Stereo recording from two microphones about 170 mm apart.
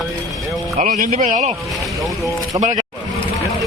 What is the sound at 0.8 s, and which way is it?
Speech, 50° right (ahead or behind).